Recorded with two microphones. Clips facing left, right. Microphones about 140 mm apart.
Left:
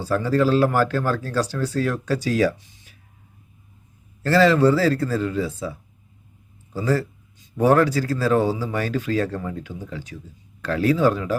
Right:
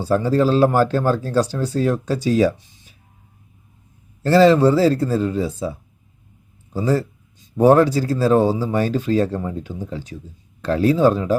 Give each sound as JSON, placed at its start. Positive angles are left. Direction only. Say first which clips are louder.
{"t": 0.0, "sound": "speech", "louder": "right 3 dB", "side_deg": -25}
{"t": 4.2, "sound": "speech", "louder": "right 4 dB", "side_deg": -25}
{"t": 6.7, "sound": "speech", "louder": "right 3 dB", "side_deg": -20}